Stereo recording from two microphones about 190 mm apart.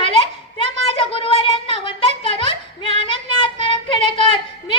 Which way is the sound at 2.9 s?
25° left (ahead or behind).